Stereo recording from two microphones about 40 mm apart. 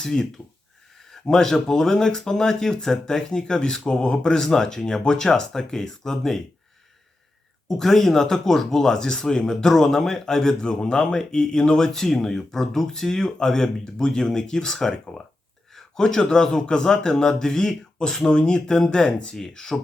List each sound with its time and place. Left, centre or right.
0.0 s speech: centre
7.7 s speech: centre